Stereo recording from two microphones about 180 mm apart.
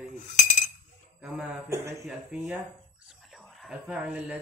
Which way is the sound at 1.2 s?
15° right (ahead or behind).